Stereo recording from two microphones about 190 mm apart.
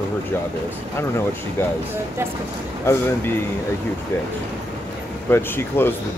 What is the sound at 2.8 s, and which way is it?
Speech, 15° left (ahead or behind).